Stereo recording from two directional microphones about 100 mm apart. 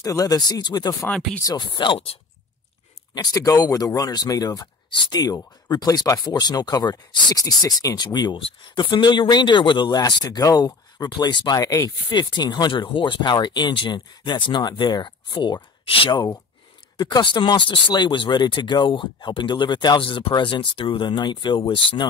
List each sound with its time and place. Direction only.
0.0 s speech: 35° left (ahead or behind)
1.1 s speech: 5° left (ahead or behind)
1.4 s speech: 45° left (ahead or behind)
3.2 s speech: 35° left (ahead or behind); by 16.1 s 65° left (ahead or behind)
17.0 s speech: 50° left (ahead or behind)